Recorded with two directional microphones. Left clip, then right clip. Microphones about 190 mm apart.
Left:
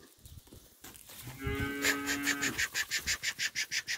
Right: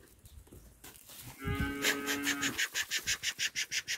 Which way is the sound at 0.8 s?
50° right (ahead or behind).